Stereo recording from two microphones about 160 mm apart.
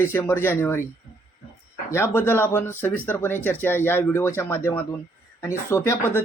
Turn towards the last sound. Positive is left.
turn(degrees=15)  # may be behind; listen again after turning